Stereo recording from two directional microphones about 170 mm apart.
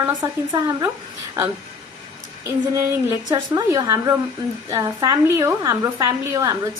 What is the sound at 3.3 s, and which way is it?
A woman's voice, 20° right (ahead or behind).